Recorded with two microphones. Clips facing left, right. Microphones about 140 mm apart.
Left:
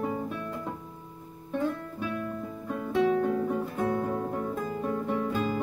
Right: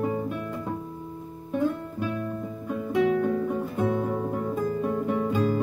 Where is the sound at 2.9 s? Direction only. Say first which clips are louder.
Right 2 dB; centre (ahead or behind).